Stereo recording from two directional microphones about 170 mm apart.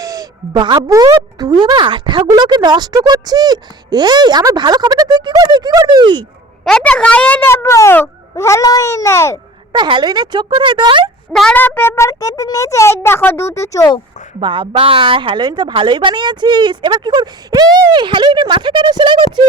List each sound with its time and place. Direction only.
0.0 s speech: 20° right (ahead or behind)
6.7 s a child's voice: 5° left (ahead or behind)
9.7 s speech: 25° right (ahead or behind)
11.3 s a child's voice: 5° left (ahead or behind); by 14.0 s 20° left (ahead or behind)
14.3 s speech: 30° right (ahead or behind)